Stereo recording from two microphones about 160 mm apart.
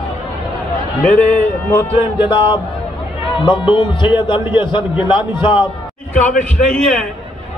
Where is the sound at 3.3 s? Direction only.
30° left (ahead or behind).